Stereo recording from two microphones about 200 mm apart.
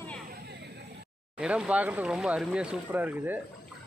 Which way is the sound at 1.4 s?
5° right (ahead or behind).